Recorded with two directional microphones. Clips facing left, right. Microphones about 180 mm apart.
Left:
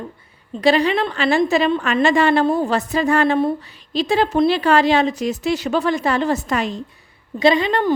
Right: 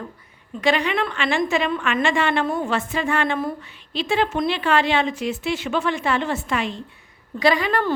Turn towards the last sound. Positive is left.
turn(degrees=25)  # may be behind; listen again after turning